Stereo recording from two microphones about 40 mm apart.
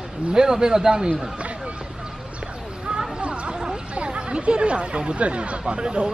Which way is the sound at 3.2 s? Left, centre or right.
Right.